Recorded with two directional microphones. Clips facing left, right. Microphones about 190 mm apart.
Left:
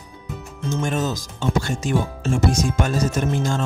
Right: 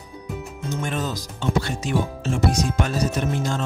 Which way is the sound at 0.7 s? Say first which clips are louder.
Left 4 dB; 45° left (ahead or behind).